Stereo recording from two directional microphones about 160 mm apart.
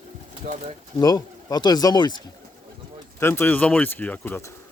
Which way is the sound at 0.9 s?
25° left (ahead or behind).